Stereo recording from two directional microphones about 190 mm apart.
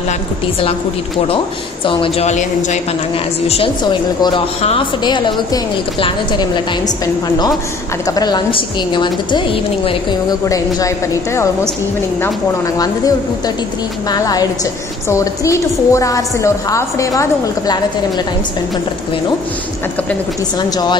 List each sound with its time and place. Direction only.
1.9 s speech: 30° left (ahead or behind)
8.1 s speech: 20° left (ahead or behind)
12.7 s speech: 20° left (ahead or behind)
14.1 s a woman's voice: 20° left (ahead or behind)
20.7 s speech: 20° left (ahead or behind)